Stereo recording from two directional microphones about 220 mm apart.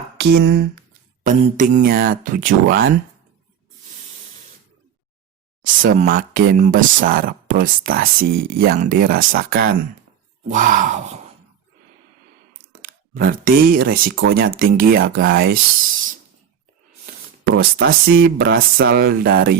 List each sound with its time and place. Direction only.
0.2 s speech: 50° right (ahead or behind)
5.6 s speech: 40° right (ahead or behind)
12.8 s speech: 40° right (ahead or behind)
17.5 s speech: 45° right (ahead or behind)